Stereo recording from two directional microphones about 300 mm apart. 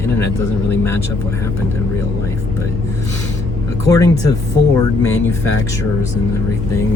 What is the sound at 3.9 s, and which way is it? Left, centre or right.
Speech, centre.